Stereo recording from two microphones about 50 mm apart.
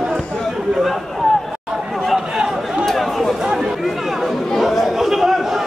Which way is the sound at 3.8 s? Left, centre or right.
Centre.